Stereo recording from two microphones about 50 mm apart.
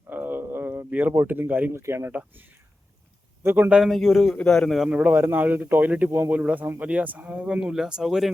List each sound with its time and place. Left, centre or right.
0.1 s a sound: right
0.9 s speech: right
1.7 s speech: right
2.1 s speech: right
3.8 s a man's voice: centre
4.4 s a man's voice: centre
4.9 s speech: right
5.1 s speech: right
6.1 s speech: right
6.3 s speech: right
7.4 s speech: centre